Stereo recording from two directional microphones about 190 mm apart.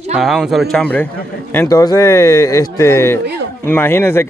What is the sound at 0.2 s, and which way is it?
A man's voice, centre (ahead or behind).